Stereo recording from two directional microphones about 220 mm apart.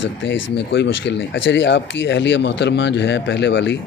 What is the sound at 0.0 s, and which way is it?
Speech, 55° left (ahead or behind).